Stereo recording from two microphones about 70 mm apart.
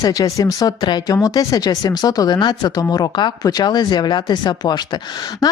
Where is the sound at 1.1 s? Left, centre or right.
Left.